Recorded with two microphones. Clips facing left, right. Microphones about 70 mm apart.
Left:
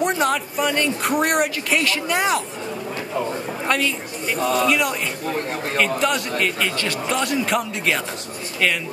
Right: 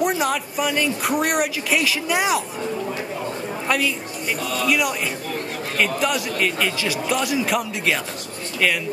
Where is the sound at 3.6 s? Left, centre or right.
Centre.